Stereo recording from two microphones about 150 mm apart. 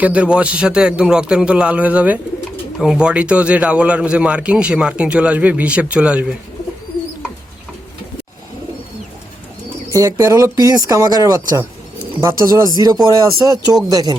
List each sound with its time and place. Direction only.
0.0 s a man's voice: 10° right (ahead or behind)
9.9 s speech: 20° right (ahead or behind)